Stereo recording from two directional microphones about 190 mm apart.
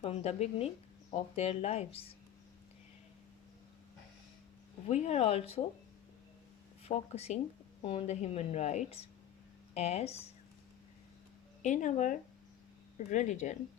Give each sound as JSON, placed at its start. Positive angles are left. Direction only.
{"t": 0.0, "sound": "a woman's voice", "side_deg": 35}
{"t": 4.9, "sound": "a woman's voice", "side_deg": 35}
{"t": 6.8, "sound": "a woman's voice", "side_deg": 35}
{"t": 11.6, "sound": "a woman's voice", "side_deg": 40}